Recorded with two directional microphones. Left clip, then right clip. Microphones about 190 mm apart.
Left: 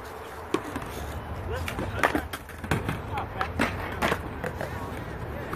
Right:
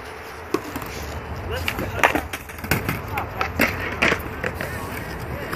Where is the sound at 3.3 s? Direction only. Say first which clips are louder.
Right 7 dB; 35° left (ahead or behind).